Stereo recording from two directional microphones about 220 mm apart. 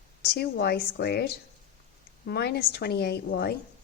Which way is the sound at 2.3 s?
45° left (ahead or behind).